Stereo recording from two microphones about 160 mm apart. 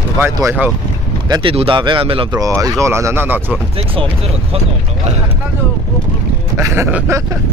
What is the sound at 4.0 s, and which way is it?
Speech, 35° right (ahead or behind).